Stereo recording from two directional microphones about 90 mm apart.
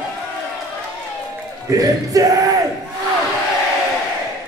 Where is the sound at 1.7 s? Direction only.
40° right (ahead or behind).